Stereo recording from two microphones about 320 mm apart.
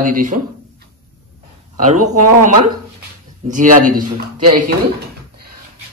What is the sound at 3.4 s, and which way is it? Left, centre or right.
Speech, right.